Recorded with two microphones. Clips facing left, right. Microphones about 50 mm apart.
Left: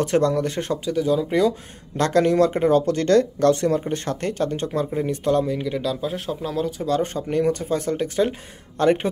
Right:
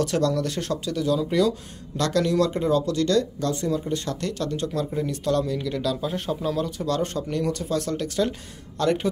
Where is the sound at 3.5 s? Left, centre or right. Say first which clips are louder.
Left 5 dB; left.